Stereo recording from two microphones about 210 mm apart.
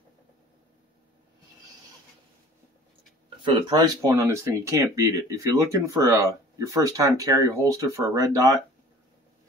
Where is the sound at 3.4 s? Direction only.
20° right (ahead or behind).